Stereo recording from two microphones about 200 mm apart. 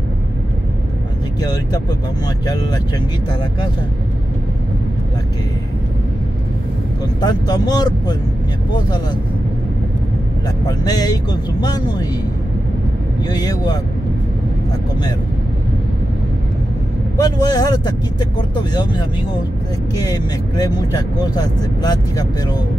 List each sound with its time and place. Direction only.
1.4 s speech: 20° left (ahead or behind)
7.2 s speech: 20° left (ahead or behind)
10.7 s speech: 20° left (ahead or behind)
13.3 s speech: 20° left (ahead or behind)
17.2 s speech: 20° left (ahead or behind)